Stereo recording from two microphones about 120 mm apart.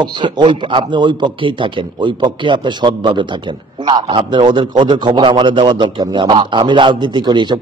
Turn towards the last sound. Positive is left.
turn(degrees=-40)  # may be behind; listen again after turning